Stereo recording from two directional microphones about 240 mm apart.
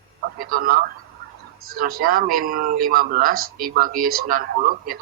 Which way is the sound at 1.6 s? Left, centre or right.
Right.